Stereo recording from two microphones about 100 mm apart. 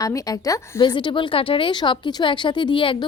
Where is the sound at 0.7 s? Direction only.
50° left (ahead or behind).